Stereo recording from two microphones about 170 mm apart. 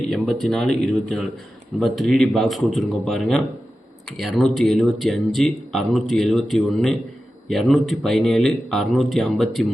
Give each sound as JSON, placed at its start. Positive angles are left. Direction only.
{"t": 0.0, "sound": "speech", "side_deg": 5}